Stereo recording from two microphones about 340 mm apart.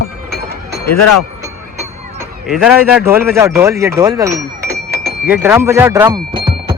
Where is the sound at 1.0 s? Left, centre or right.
Left.